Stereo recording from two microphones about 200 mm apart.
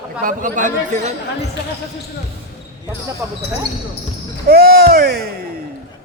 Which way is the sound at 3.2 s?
10° right (ahead or behind).